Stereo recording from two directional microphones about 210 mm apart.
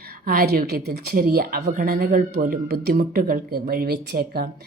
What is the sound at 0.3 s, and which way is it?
A woman's voice, 45° right (ahead or behind).